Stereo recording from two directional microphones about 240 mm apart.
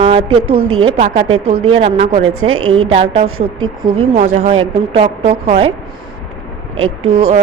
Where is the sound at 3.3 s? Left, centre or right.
Right.